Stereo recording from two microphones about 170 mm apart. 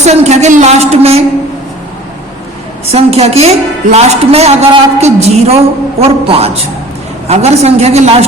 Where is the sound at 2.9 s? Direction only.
35° right (ahead or behind).